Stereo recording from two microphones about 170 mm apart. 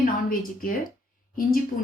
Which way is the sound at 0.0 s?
55° left (ahead or behind).